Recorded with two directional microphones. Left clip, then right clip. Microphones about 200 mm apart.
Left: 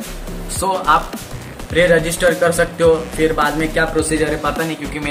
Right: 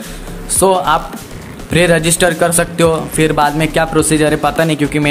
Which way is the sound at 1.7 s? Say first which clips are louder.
Right 2 dB; 45° right (ahead or behind).